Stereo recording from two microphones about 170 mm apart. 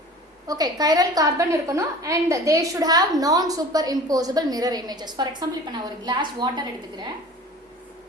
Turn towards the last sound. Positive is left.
turn(degrees=-25)  # may be behind; listen again after turning